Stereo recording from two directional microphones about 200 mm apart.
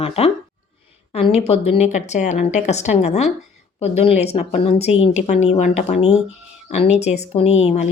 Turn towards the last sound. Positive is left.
turn(degrees=35)  # may be behind; listen again after turning